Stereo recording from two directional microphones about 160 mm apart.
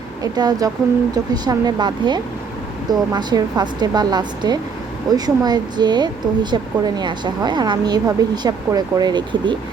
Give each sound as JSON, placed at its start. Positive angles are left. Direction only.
{"t": 0.2, "sound": "speech", "side_deg": -25}